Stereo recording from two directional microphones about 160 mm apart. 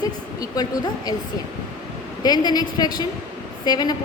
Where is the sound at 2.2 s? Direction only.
25° left (ahead or behind).